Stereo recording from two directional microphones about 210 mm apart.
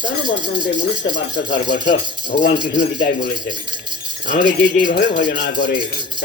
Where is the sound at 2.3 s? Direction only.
50° left (ahead or behind).